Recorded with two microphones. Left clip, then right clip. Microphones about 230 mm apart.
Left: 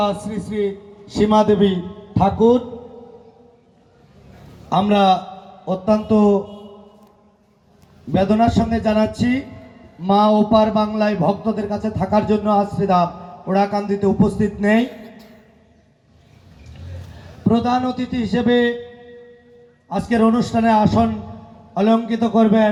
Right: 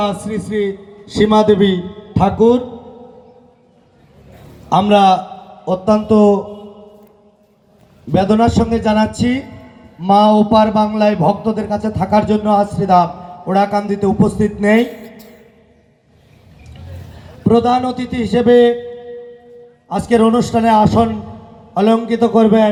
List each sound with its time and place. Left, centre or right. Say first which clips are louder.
0.1 s a man's voice: right 4 dB; right
4.7 s a man's voice: right 5 dB; right
8.1 s a man's voice: right 3 dB; right
17.4 s a man's voice: right 6 dB; right
19.9 s a man's voice: right 5 dB; right